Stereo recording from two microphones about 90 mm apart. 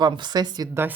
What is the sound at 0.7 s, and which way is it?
Speech, 25° right (ahead or behind).